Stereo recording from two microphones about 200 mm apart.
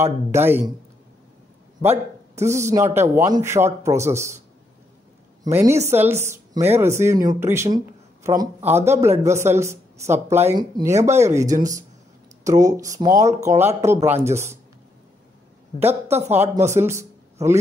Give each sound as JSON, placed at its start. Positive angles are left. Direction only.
{"t": 0.0, "sound": "speech", "side_deg": -10}
{"t": 1.8, "sound": "speech", "side_deg": -15}
{"t": 5.4, "sound": "a woman's voice", "side_deg": -10}
{"t": 16.7, "sound": "speech", "side_deg": -15}